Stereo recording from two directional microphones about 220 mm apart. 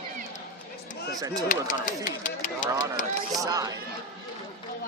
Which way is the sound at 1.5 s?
35° left (ahead or behind).